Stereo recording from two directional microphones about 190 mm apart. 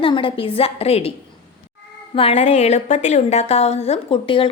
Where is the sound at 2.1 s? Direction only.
35° left (ahead or behind).